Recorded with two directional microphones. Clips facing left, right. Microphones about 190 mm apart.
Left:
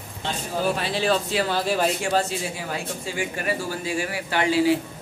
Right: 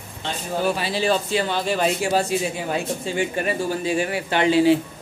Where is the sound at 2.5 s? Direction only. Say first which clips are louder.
Right 5 dB; 25° right (ahead or behind).